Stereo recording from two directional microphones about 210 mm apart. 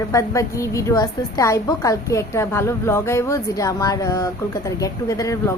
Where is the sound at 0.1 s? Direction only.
15° left (ahead or behind).